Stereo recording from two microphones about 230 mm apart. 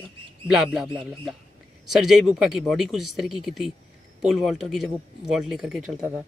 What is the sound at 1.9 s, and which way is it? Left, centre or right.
Speech, centre.